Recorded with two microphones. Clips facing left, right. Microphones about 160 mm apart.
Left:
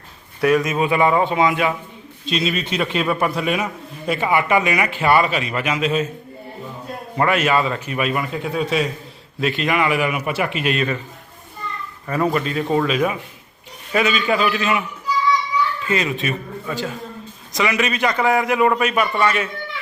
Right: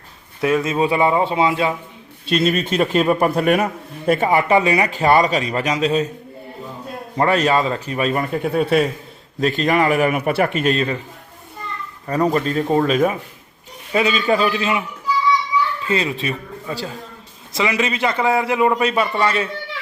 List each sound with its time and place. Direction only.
0.4 s a man's voice: 25° right (ahead or behind)
2.3 s a man's voice: 50° right (ahead or behind)
4.3 s a man's voice: 35° right (ahead or behind)
7.2 s a man's voice: 35° right (ahead or behind); by 8.8 s 55° right (ahead or behind)
9.4 s a man's voice: 40° right (ahead or behind)
12.0 s a man's voice: 35° right (ahead or behind)
13.9 s a man's voice: 30° right (ahead or behind)
15.9 s a man's voice: 30° right (ahead or behind)